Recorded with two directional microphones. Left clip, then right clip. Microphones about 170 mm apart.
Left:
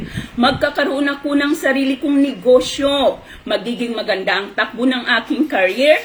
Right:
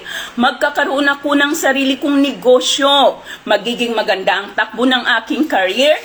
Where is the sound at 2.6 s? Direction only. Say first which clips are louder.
Right 6 dB; 45° right (ahead or behind).